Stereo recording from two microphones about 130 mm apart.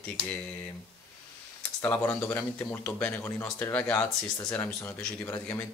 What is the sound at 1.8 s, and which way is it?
Speech, 15° left (ahead or behind).